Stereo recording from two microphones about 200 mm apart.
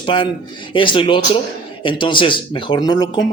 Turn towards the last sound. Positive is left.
turn(degrees=20)  # may be behind; listen again after turning